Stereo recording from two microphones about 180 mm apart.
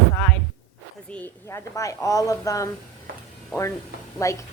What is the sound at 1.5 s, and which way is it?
Speech, 20° left (ahead or behind).